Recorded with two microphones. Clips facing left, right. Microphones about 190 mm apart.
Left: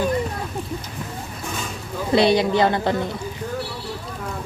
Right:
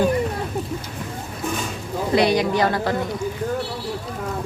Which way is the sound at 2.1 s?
30° left (ahead or behind).